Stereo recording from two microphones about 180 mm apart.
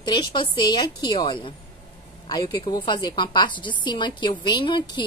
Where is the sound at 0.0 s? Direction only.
25° left (ahead or behind).